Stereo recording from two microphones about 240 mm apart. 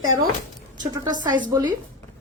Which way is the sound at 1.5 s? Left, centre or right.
Centre.